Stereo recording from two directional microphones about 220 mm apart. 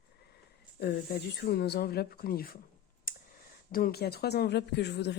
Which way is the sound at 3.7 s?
40° left (ahead or behind).